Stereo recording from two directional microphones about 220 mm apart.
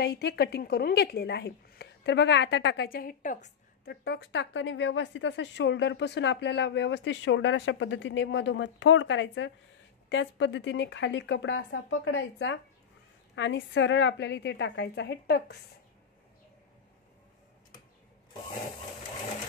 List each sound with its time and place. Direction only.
0.0 s a woman's voice: 50° left (ahead or behind)
3.9 s a woman's voice: 50° left (ahead or behind)